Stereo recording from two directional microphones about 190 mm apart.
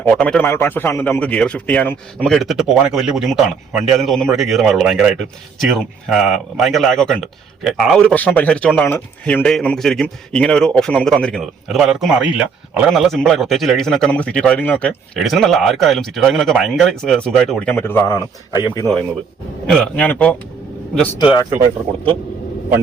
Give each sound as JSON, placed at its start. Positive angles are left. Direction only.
{"t": 0.0, "sound": "a man's voice", "side_deg": 5}
{"t": 19.6, "sound": "a man's voice", "side_deg": 0}
{"t": 21.2, "sound": "speech", "side_deg": 20}